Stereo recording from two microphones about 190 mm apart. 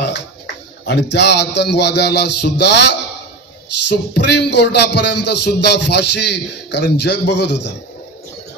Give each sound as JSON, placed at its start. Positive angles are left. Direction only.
{"t": 0.8, "sound": "music", "side_deg": 65}
{"t": 3.9, "sound": "music", "side_deg": 65}